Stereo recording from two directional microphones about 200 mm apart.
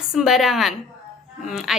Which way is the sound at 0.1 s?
Centre (ahead or behind).